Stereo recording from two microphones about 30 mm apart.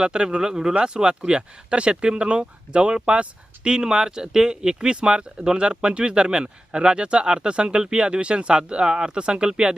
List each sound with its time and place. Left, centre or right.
0.0 s speech: right
1.2 s speech: right